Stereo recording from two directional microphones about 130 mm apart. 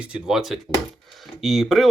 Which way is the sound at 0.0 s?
5° right (ahead or behind).